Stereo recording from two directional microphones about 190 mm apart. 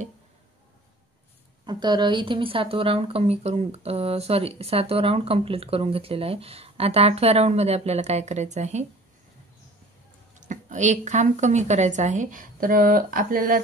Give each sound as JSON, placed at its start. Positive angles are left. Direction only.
{"t": 1.7, "sound": "speech", "side_deg": -25}
{"t": 10.3, "sound": "speech", "side_deg": -40}